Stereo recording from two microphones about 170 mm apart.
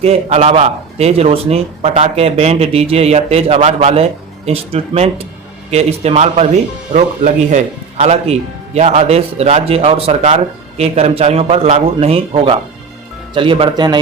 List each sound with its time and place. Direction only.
0.0 s a man's voice: 40° right (ahead or behind)